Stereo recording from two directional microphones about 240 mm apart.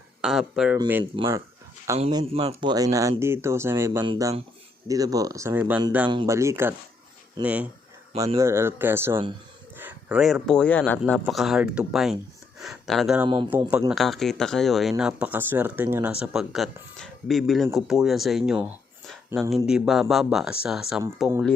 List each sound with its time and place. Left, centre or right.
0.2 s speech: centre
13.2 s a man's voice: centre
13.7 s speech: centre